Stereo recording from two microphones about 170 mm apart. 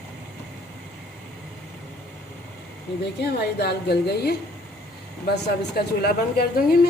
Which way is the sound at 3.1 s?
70° left (ahead or behind).